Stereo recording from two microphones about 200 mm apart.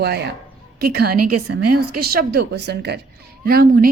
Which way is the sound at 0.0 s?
55° right (ahead or behind).